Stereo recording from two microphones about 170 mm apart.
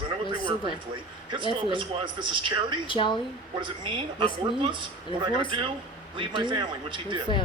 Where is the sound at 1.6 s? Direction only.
30° right (ahead or behind).